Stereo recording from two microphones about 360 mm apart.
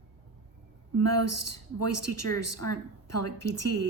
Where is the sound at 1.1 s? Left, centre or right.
Left.